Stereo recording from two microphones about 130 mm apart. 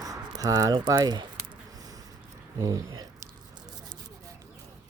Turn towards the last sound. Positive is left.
turn(degrees=-30)  # may be behind; listen again after turning